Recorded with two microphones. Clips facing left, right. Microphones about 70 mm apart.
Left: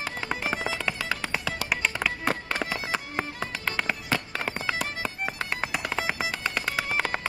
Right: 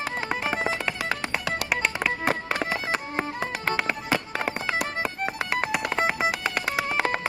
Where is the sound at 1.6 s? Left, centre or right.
Centre.